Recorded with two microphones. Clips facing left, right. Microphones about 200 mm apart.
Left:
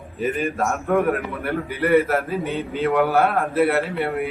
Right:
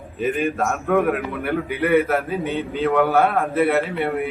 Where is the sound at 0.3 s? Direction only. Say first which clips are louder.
Right 1 dB; centre (ahead or behind).